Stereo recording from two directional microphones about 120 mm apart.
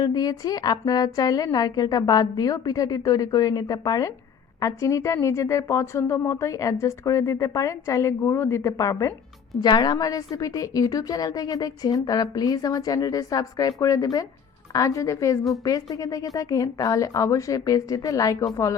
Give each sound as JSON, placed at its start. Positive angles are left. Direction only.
{"t": 0.0, "sound": "a woman's voice", "side_deg": 30}